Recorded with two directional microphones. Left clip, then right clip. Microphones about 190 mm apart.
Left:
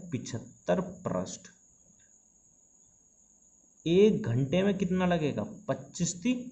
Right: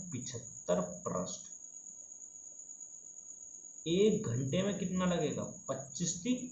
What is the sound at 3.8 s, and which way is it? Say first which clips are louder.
Speech: left 6 dB; 60° left (ahead or behind).